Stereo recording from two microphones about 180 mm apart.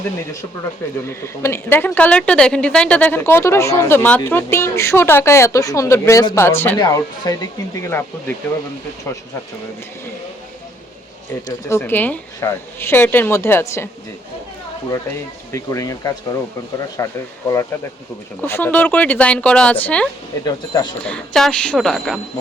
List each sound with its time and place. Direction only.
1.0 s a woman's voice: 15° left (ahead or behind)
11.4 s a woman's voice: 15° left (ahead or behind)
15.5 s a woman's voice: 20° left (ahead or behind)
18.4 s a woman's voice: 10° left (ahead or behind)
20.4 s speech: 20° left (ahead or behind)
21.0 s a woman's voice: 5° left (ahead or behind)